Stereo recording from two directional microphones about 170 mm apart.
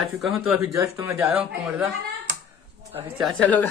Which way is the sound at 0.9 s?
20° right (ahead or behind).